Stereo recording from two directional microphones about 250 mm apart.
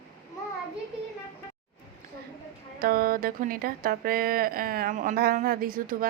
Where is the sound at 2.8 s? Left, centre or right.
Right.